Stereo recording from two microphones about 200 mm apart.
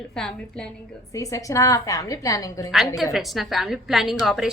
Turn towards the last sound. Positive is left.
turn(degrees=0)  # may be behind; listen again after turning